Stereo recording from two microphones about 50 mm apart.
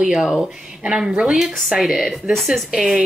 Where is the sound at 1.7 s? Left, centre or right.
Centre.